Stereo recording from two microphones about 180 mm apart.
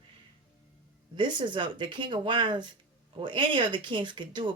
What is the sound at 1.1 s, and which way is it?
Speech, 25° right (ahead or behind).